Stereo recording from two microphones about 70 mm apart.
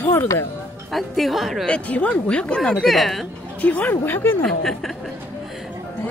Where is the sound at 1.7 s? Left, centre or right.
Left; by 3.3 s centre.